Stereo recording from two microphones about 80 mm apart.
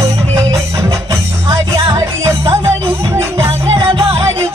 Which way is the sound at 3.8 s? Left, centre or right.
Right.